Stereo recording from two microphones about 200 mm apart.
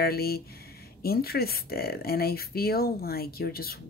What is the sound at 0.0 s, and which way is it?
Speech, 50° left (ahead or behind).